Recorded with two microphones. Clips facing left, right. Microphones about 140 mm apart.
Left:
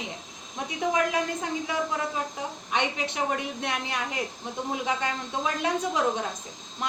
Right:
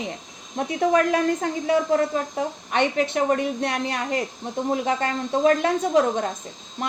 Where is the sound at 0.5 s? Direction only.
55° right (ahead or behind).